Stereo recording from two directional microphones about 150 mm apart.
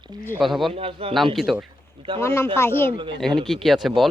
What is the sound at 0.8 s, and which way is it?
Speech, 40° right (ahead or behind).